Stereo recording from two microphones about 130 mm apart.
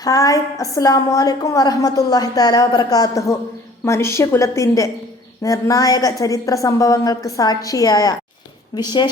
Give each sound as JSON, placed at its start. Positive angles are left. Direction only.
{"t": 0.0, "sound": "a woman's voice", "side_deg": 30}